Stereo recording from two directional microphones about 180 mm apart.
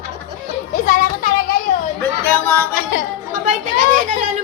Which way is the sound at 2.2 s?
5° left (ahead or behind).